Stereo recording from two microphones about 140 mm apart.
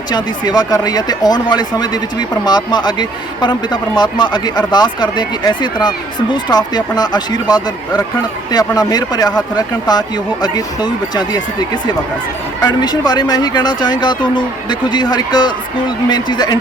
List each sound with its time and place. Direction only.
0.1 s speech: 30° left (ahead or behind)